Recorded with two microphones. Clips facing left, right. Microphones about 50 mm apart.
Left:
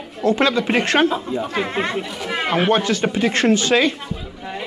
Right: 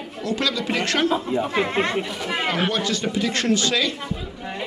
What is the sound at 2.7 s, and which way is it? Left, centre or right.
Speech, left.